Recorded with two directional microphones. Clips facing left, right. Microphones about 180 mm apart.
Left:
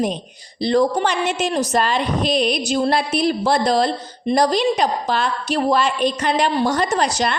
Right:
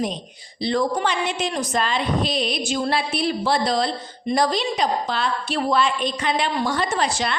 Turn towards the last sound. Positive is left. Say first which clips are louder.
# left 4 dB
turn(degrees=40)  # may be behind; listen again after turning